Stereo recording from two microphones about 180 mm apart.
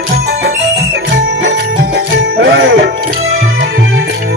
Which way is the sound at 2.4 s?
75° right (ahead or behind).